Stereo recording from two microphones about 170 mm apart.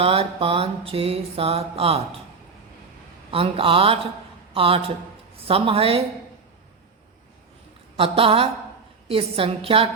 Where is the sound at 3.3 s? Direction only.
35° right (ahead or behind).